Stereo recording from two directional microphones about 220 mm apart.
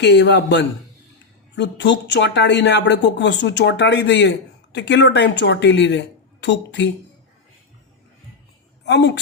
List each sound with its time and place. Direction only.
0.0 s speech: 50° left (ahead or behind)
8.8 s a woman's voice: 50° left (ahead or behind)